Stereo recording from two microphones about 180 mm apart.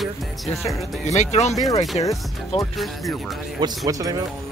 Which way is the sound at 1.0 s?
40° left (ahead or behind).